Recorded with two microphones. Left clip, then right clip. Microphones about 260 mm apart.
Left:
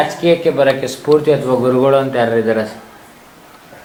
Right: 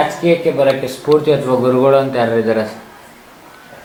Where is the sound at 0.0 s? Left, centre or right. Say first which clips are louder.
Left 1 dB; centre.